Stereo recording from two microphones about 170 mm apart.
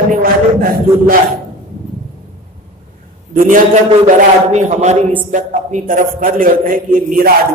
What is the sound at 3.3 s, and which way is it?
A man's voice, 50° right (ahead or behind).